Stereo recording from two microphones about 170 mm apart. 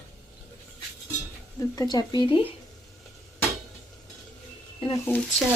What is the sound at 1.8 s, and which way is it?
Speech, 25° left (ahead or behind).